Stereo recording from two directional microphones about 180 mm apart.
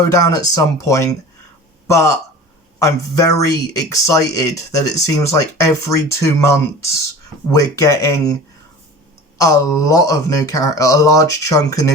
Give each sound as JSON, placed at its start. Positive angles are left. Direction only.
{"t": 0.1, "sound": "speech", "side_deg": 20}
{"t": 9.4, "sound": "speech", "side_deg": 15}